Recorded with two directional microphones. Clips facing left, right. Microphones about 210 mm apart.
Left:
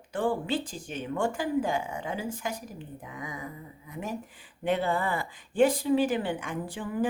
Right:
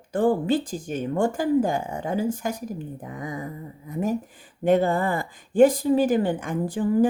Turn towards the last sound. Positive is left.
turn(degrees=-40)  # may be behind; listen again after turning